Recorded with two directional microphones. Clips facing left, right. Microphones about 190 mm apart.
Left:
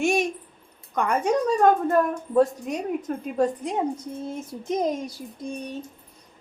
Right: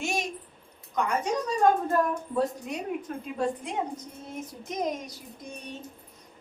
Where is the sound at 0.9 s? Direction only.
55° left (ahead or behind).